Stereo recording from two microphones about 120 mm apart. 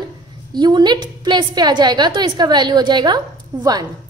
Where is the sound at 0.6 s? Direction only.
35° right (ahead or behind).